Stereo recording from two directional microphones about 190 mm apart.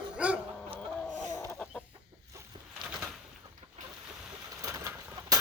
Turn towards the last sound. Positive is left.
turn(degrees=-10)  # may be behind; listen again after turning